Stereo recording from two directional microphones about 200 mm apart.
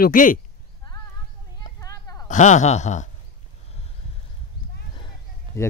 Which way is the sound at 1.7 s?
15° left (ahead or behind).